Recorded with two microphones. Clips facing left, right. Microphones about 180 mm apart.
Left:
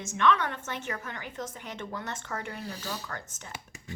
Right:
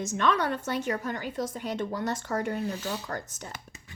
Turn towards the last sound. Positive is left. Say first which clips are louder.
# right 5 dB
turn(degrees=-35)  # may be behind; listen again after turning